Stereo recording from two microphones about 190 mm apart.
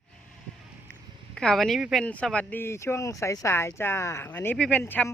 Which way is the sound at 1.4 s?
5° left (ahead or behind).